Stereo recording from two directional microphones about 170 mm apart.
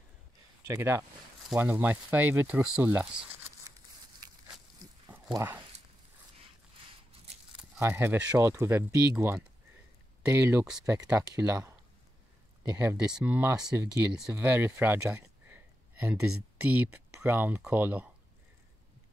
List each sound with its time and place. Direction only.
0.7 s speech: 15° right (ahead or behind)
5.3 s speech: 15° right (ahead or behind)
7.8 s speech: 15° right (ahead or behind)